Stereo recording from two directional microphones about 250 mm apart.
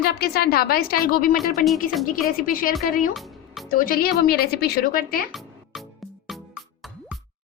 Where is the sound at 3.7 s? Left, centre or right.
Left.